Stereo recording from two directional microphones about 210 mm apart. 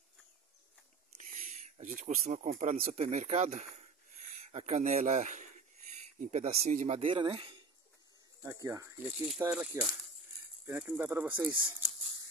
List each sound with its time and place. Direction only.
1.1 s speech: 35° right (ahead or behind)
8.6 s speech: 15° right (ahead or behind)